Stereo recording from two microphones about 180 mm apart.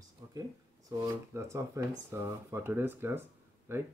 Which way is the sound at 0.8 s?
20° right (ahead or behind).